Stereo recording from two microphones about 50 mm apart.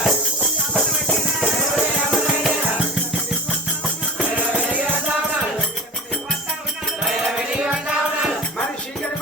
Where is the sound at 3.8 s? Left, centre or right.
Right.